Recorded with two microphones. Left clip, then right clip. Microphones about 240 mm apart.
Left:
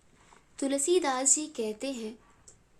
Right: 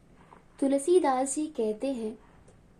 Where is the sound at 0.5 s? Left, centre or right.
Centre.